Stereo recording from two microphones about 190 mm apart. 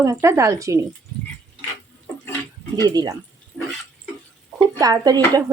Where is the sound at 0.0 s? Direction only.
15° right (ahead or behind).